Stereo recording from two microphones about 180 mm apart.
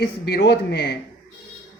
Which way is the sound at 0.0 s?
65° left (ahead or behind).